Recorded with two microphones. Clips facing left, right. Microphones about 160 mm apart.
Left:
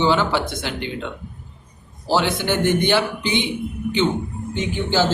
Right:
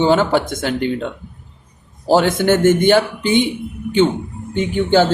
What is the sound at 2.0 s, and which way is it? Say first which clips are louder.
A man's voice: right 7 dB; 45° right (ahead or behind).